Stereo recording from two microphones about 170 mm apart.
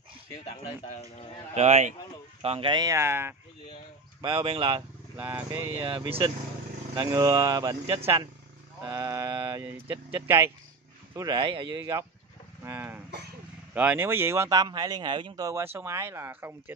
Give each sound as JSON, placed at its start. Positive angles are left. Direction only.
{"t": 0.5, "sound": "speech", "side_deg": 40}
{"t": 1.5, "sound": "speech", "side_deg": -40}
{"t": 4.2, "sound": "speech", "side_deg": -25}
{"t": 5.1, "sound": "speech", "side_deg": -10}
{"t": 5.8, "sound": "speech", "side_deg": -30}
{"t": 7.0, "sound": "speech", "side_deg": -15}
{"t": 11.1, "sound": "speech", "side_deg": -25}
{"t": 12.6, "sound": "a sound", "side_deg": -10}
{"t": 13.7, "sound": "speech", "side_deg": -10}